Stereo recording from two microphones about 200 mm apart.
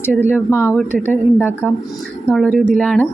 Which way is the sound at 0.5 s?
10° left (ahead or behind).